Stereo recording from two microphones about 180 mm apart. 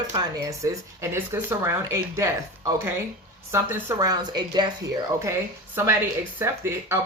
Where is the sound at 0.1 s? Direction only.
20° right (ahead or behind).